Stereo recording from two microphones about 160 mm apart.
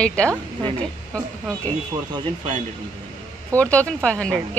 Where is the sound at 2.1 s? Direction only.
30° right (ahead or behind).